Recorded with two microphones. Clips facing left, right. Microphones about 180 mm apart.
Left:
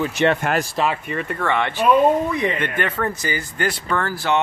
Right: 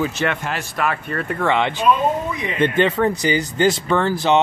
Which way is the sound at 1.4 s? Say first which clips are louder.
Right 2 dB; 20° right (ahead or behind).